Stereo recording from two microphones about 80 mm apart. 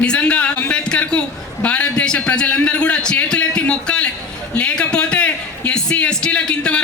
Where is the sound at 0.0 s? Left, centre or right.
Centre.